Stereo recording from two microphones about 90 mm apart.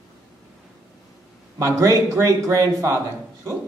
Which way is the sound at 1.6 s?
35° right (ahead or behind).